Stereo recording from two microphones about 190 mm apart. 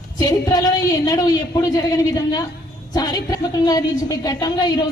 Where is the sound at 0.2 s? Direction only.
20° left (ahead or behind).